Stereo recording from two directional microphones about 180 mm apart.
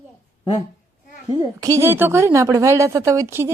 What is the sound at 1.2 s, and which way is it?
A woman's voice, 20° right (ahead or behind).